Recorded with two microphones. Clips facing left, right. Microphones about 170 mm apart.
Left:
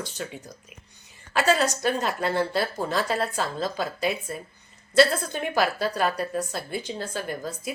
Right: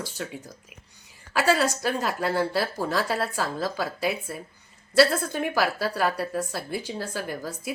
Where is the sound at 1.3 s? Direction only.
5° right (ahead or behind).